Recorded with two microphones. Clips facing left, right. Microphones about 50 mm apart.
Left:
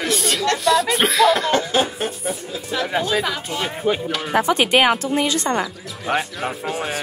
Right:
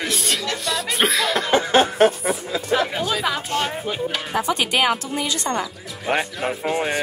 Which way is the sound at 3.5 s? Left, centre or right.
Right.